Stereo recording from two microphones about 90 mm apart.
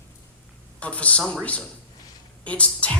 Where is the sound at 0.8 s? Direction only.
15° left (ahead or behind).